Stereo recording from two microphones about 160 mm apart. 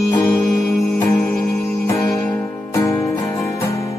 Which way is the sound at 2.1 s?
10° left (ahead or behind).